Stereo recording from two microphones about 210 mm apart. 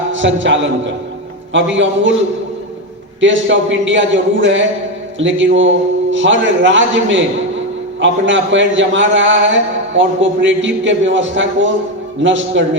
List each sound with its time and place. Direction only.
0.1 s a man's voice: 60° right (ahead or behind)
3.2 s a man's voice: 60° right (ahead or behind)